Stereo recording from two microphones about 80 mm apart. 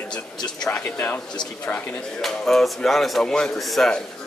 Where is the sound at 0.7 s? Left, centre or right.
Left.